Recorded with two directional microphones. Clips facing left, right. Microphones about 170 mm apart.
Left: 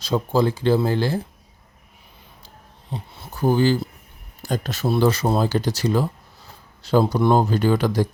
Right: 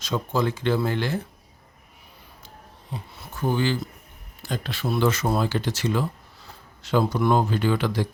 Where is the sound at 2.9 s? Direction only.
30° left (ahead or behind).